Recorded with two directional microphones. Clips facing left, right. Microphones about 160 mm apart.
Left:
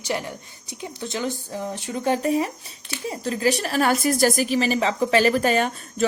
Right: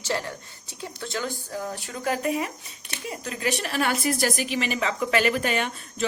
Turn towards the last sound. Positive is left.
turn(degrees=40)  # may be behind; listen again after turning